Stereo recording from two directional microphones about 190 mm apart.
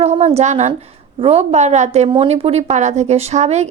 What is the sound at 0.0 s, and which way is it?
A woman's voice, 35° right (ahead or behind).